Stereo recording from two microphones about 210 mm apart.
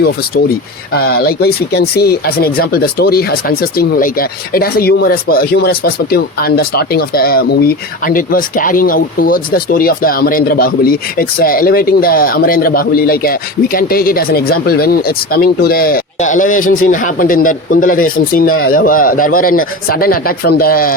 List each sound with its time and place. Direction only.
0.9 s speech: 45° left (ahead or behind)